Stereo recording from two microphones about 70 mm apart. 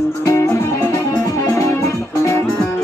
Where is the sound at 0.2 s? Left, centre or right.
Left.